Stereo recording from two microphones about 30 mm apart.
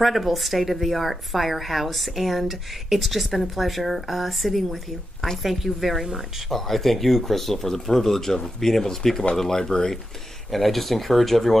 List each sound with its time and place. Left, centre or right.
0.0 s a woman's voice: centre
10.5 s a woman's voice: centre